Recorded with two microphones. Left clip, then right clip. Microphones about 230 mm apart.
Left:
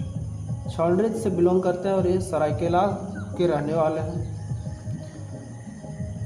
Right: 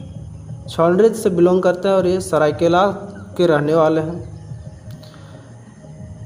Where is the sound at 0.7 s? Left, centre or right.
Right.